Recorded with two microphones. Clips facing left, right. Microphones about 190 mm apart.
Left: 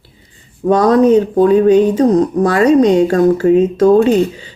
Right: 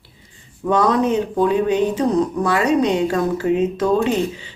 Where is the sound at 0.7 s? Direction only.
40° left (ahead or behind).